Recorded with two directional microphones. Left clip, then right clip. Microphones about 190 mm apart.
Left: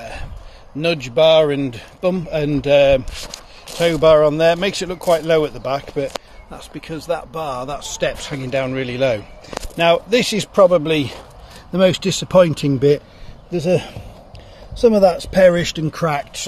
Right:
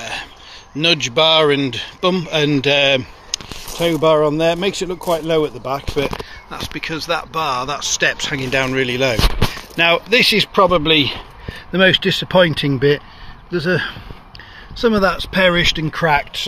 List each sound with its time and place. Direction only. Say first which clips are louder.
0.0 s a sound: right 6 dB; centre (ahead or behind)
0.7 s a man's voice: right 2 dB; centre (ahead or behind)
15.0 s a man's voice: left 3 dB; 10° left (ahead or behind)